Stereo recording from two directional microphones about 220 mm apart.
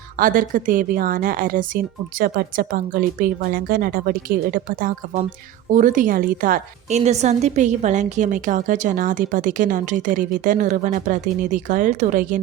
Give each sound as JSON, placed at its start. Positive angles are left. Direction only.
{"t": 0.2, "sound": "a woman's voice", "side_deg": -40}